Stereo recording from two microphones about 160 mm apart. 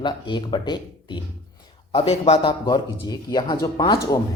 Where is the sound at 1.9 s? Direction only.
40° left (ahead or behind).